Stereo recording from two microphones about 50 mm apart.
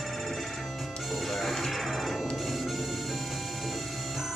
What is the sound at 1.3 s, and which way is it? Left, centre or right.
Music, centre.